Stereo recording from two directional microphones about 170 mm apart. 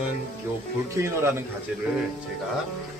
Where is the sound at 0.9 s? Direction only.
15° right (ahead or behind).